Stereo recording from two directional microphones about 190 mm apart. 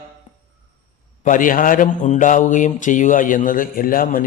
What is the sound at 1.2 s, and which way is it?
Speech, 45° left (ahead or behind).